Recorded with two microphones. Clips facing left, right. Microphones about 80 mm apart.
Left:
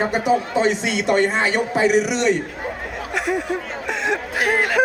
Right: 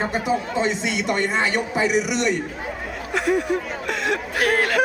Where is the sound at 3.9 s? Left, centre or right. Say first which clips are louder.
Left 2 dB; centre.